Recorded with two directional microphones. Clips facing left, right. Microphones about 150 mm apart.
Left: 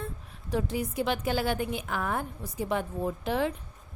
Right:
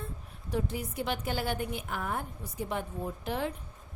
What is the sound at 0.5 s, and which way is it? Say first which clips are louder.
A woman's voice: left 4 dB; 90° left.